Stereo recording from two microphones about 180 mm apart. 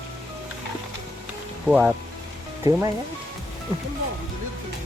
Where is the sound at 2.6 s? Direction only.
20° right (ahead or behind).